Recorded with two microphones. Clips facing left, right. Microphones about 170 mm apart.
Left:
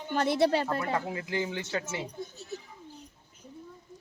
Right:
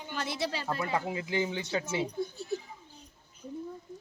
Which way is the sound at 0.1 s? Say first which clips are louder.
Left 9 dB; 55° left (ahead or behind).